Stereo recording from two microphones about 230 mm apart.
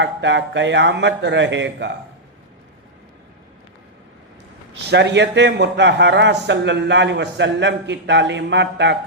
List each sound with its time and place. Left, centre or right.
0.0 s a man's voice: right
4.9 s a man's voice: right